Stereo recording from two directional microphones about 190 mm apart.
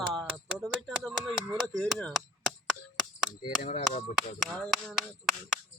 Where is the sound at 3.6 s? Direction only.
35° left (ahead or behind).